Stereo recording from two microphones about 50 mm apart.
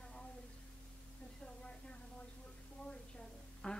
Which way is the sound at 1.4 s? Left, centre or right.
Centre.